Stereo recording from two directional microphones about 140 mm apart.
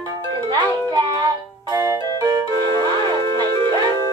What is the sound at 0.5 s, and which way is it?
Music, 30° right (ahead or behind).